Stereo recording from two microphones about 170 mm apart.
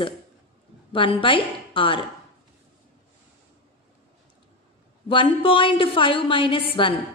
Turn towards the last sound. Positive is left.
turn(degrees=30)  # may be behind; listen again after turning